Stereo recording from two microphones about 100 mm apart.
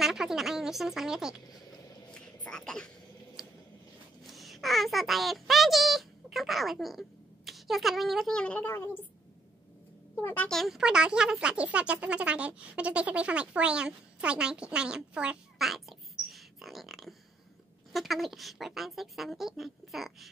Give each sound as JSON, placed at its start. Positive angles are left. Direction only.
{"t": 0.0, "sound": "speech", "side_deg": -5}
{"t": 2.0, "sound": "a sound", "side_deg": 10}
{"t": 3.4, "sound": "a sound", "side_deg": -5}
{"t": 4.3, "sound": "speech", "side_deg": 0}
{"t": 8.4, "sound": "a woman's voice", "side_deg": 15}
{"t": 10.2, "sound": "speech", "side_deg": 20}
{"t": 10.5, "sound": "speech", "side_deg": 0}